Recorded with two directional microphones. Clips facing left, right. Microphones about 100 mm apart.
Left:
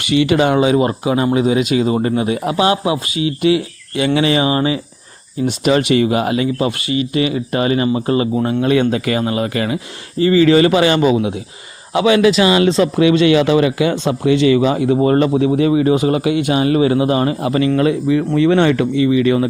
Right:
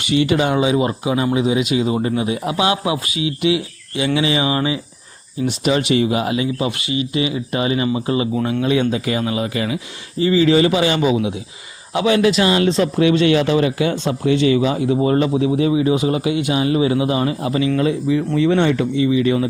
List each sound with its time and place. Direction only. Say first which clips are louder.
0.0 s speech: left 3 dB; 75° left (ahead or behind); by 4.4 s 55° left (ahead or behind)
4.4 s speech: left 3 dB; 35° left (ahead or behind)
5.5 s speech: left 3 dB; 55° left (ahead or behind)
11.9 s a man's voice: left 3 dB; 90° left; by 14.9 s 65° left (ahead or behind)
15.0 s speech: left 3 dB; 55° left (ahead or behind)